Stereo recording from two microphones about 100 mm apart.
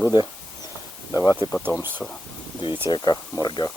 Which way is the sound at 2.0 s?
5° left (ahead or behind).